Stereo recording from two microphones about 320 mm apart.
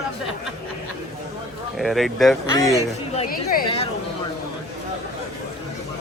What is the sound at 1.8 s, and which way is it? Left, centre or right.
Speech, centre.